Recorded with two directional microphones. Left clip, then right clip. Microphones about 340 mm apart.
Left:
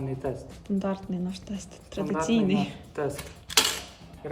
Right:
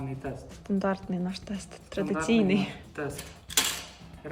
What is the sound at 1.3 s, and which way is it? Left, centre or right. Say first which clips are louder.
Speech: right 1 dB; left.